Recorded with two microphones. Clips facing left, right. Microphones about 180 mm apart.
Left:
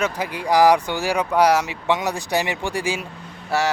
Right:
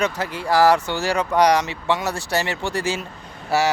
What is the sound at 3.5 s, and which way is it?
Speech, 5° right (ahead or behind).